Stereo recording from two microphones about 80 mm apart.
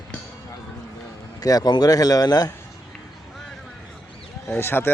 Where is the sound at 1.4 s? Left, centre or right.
Left.